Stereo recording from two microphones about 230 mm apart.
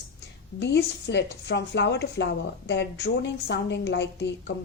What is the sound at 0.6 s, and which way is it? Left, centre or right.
A woman's voice, left.